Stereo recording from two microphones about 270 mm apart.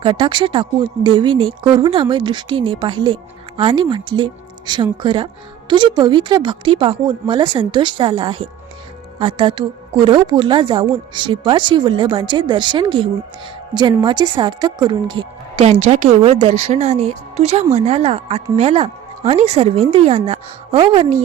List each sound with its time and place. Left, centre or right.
0.0 s a woman's voice: centre